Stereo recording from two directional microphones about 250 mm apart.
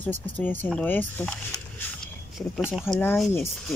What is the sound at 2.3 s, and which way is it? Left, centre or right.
Speech, centre.